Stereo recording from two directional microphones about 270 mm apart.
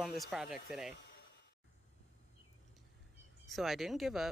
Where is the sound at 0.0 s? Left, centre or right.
Centre.